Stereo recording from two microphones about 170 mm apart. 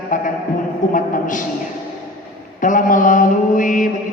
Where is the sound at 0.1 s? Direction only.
50° left (ahead or behind).